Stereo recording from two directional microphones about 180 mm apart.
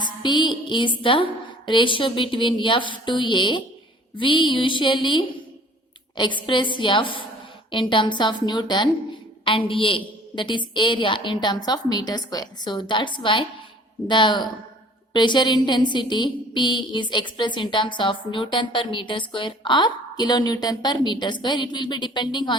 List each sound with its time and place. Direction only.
0.0 s a woman's voice: 25° left (ahead or behind)